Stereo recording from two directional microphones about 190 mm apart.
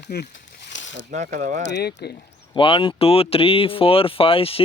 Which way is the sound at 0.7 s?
75° left (ahead or behind).